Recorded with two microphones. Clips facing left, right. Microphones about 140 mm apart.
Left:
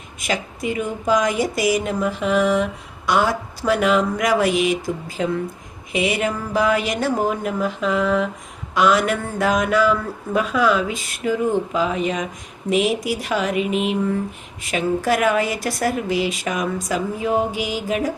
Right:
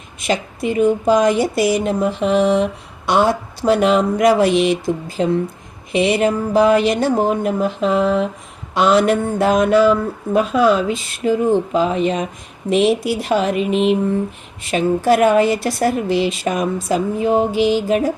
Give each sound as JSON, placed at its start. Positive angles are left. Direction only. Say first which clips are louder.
{"t": 0.2, "sound": "speech", "louder": "right 5 dB", "side_deg": -25}